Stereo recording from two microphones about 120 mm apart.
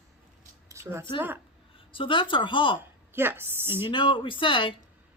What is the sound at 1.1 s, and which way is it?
Speech, 15° right (ahead or behind).